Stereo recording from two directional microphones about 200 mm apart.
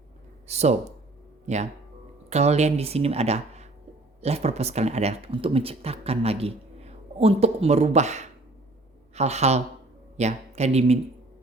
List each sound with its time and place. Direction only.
0.4 s speech: 35° right (ahead or behind)